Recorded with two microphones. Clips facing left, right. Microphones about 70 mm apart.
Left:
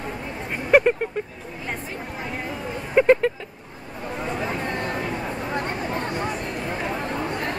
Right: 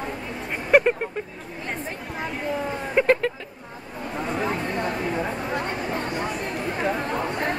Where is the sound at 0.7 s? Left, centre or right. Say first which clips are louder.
Left 1 dB; centre.